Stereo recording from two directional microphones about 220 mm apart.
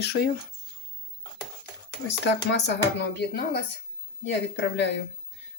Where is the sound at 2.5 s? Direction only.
50° left (ahead or behind).